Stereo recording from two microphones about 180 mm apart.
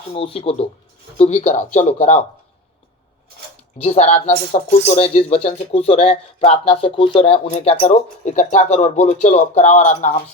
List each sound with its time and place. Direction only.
0.1 s speech: 30° left (ahead or behind)
3.8 s speech: 40° left (ahead or behind)